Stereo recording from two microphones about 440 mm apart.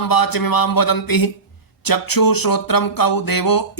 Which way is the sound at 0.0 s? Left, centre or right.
Left.